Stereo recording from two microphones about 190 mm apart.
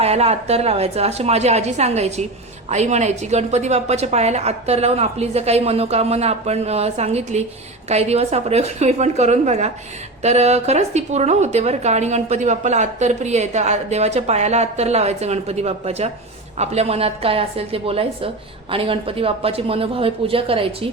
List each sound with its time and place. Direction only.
0.0 s a woman's voice: 35° right (ahead or behind)